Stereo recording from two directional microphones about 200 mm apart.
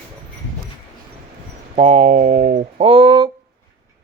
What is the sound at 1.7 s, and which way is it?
Speech, 35° right (ahead or behind).